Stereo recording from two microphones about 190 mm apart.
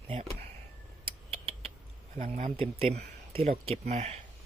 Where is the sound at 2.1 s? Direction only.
40° right (ahead or behind).